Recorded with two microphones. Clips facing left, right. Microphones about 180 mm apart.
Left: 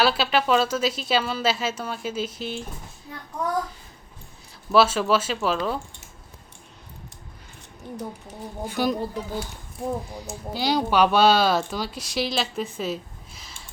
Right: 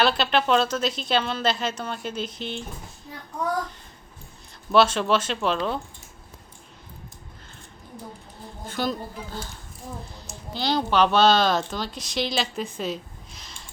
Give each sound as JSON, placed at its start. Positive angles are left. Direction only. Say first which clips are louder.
{"t": 0.0, "sound": "a woman's voice", "louder": "even", "side_deg": 5}
{"t": 4.7, "sound": "speech", "louder": "even", "side_deg": 5}
{"t": 8.6, "sound": "a woman's voice", "louder": "left 3 dB", "side_deg": 10}
{"t": 10.5, "sound": "a woman's voice", "louder": "left 1 dB", "side_deg": 10}